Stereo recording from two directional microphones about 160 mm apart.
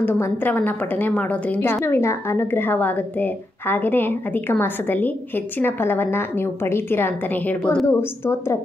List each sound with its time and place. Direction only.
0.0 s a woman's voice: 10° left (ahead or behind)